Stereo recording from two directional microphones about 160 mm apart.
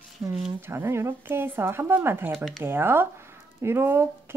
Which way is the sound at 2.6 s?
15° right (ahead or behind).